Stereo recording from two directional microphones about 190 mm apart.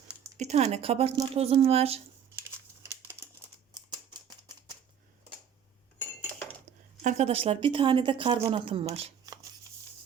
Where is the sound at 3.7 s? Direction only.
20° right (ahead or behind).